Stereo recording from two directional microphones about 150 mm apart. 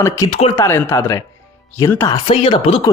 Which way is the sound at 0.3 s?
45° left (ahead or behind).